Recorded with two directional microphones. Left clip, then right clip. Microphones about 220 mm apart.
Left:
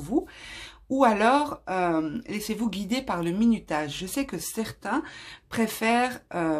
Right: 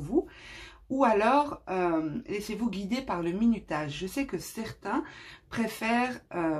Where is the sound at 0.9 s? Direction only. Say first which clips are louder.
Left 3 dB; 40° left (ahead or behind).